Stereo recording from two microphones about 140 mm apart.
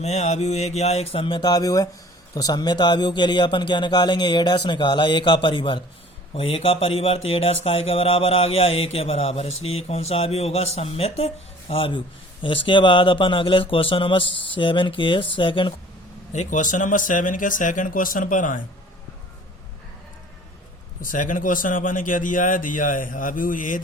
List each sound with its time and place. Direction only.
0.0 s a man's voice: 55° left (ahead or behind); by 15.7 s 35° left (ahead or behind)
16.3 s speech: 60° left (ahead or behind)
21.0 s speech: 70° left (ahead or behind)